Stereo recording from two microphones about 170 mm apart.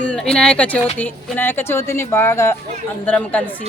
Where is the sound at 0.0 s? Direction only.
5° left (ahead or behind).